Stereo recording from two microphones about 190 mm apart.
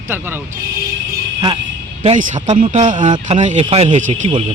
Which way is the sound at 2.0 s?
40° right (ahead or behind).